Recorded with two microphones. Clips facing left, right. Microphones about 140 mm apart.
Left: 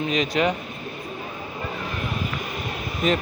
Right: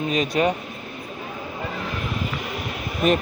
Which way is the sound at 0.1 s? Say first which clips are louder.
Right 2 dB; 40° right (ahead or behind).